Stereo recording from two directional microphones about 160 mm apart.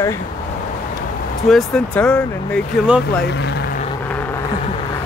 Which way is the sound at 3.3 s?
90° left.